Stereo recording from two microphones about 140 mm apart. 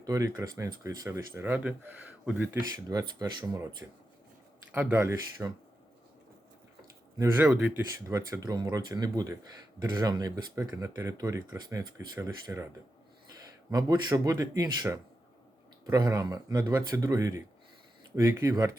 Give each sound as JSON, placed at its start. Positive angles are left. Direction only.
{"t": 0.0, "sound": "speech", "side_deg": -25}
{"t": 2.7, "sound": "speech", "side_deg": -25}
{"t": 4.7, "sound": "speech", "side_deg": -15}
{"t": 7.2, "sound": "speech", "side_deg": -15}
{"t": 8.0, "sound": "speech", "side_deg": -25}
{"t": 13.7, "sound": "speech", "side_deg": -25}